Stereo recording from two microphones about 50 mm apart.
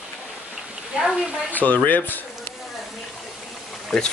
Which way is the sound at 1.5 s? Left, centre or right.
Left.